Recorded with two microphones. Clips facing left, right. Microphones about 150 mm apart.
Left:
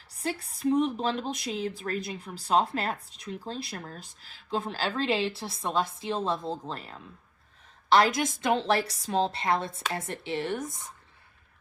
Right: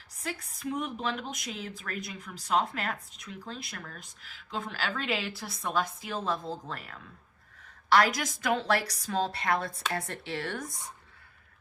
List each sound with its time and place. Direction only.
0.2 s a woman's voice: 30° left (ahead or behind)